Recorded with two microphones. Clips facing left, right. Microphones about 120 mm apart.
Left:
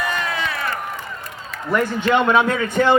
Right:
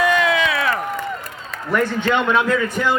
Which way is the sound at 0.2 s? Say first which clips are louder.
Right 6 dB; 90° right.